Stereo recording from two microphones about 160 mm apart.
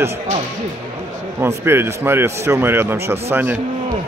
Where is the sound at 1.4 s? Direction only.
15° right (ahead or behind).